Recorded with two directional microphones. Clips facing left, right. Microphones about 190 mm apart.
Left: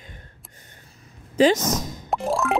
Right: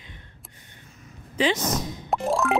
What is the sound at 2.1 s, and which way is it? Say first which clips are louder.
Music: even; centre (ahead or behind).